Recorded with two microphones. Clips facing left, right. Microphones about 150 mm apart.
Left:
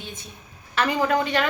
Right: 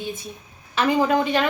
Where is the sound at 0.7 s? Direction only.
15° right (ahead or behind).